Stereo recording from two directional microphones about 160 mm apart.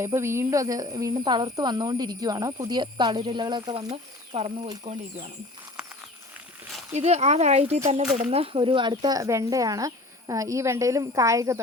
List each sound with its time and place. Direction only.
0.0 s speech: 15° right (ahead or behind)
4.3 s speech: 35° right (ahead or behind)
5.8 s a sound: 5° right (ahead or behind)
6.9 s speech: 45° right (ahead or behind); by 11.6 s 20° right (ahead or behind)